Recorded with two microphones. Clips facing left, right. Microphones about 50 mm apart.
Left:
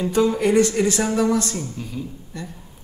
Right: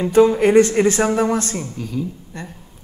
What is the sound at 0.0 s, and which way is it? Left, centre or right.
A man's voice, right.